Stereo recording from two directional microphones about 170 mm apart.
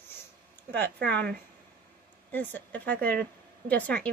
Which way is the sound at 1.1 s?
10° left (ahead or behind).